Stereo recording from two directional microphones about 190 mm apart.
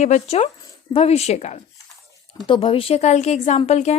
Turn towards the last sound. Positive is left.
turn(degrees=35)  # may be behind; listen again after turning